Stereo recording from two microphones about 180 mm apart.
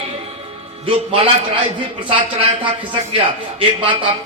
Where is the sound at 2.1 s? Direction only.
30° right (ahead or behind).